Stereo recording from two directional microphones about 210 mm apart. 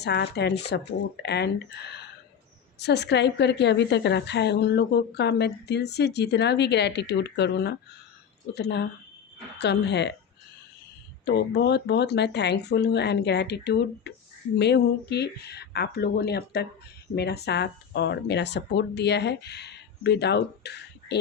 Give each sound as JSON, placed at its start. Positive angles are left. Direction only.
{"t": 0.0, "sound": "a woman's voice", "side_deg": 55}
{"t": 11.3, "sound": "a woman's voice", "side_deg": 50}